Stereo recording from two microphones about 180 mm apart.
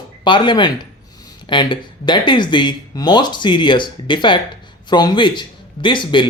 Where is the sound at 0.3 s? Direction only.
25° left (ahead or behind).